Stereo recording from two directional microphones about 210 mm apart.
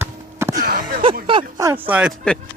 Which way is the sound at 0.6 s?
45° right (ahead or behind).